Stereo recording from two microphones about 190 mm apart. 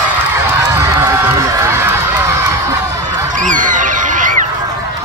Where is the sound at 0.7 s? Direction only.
15° right (ahead or behind).